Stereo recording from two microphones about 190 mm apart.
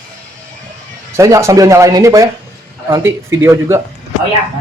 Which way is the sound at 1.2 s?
15° right (ahead or behind).